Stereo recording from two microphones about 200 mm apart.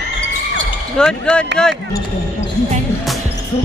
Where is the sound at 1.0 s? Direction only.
5° left (ahead or behind).